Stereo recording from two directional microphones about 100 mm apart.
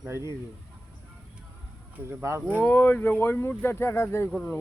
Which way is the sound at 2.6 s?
15° left (ahead or behind).